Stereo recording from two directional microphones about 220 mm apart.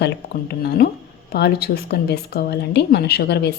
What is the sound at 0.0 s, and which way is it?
A woman's voice, 45° left (ahead or behind).